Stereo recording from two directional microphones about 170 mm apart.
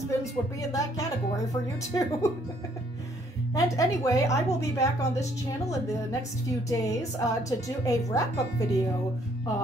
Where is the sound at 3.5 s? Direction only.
20° left (ahead or behind).